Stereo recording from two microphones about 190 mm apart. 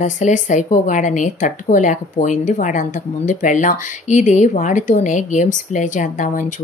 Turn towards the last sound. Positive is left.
turn(degrees=40)  # may be behind; listen again after turning